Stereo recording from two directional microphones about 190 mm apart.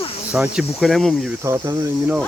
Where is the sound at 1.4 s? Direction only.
15° right (ahead or behind).